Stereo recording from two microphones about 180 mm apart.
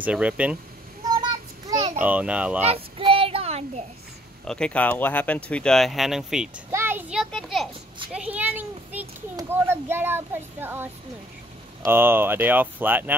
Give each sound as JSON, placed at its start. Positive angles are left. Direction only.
{"t": 0.0, "sound": "a child's voice", "side_deg": -5}
{"t": 1.1, "sound": "a sound", "side_deg": -20}
{"t": 2.0, "sound": "a child's voice", "side_deg": -10}
{"t": 2.7, "sound": "child singing", "side_deg": -30}
{"t": 4.5, "sound": "speech", "side_deg": 5}
{"t": 6.7, "sound": "a sound", "side_deg": -10}
{"t": 8.1, "sound": "a child's voice", "side_deg": -5}